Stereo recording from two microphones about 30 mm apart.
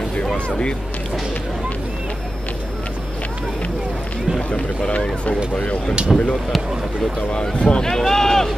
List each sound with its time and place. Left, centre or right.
4.4 s speech: left
6.1 s speech: centre
7.5 s speech: left
7.8 s speech: centre